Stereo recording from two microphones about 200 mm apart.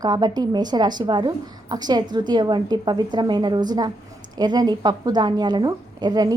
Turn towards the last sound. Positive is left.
turn(degrees=-20)  # may be behind; listen again after turning